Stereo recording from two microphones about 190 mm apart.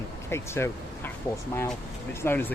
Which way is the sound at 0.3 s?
15° left (ahead or behind).